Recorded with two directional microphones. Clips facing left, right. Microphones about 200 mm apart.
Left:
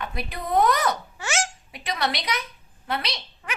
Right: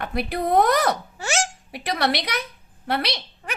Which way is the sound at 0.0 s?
65° right (ahead or behind).